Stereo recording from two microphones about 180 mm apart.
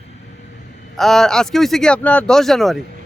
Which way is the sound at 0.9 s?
Centre (ahead or behind).